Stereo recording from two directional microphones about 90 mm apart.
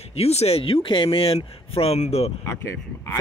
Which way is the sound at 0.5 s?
90° left.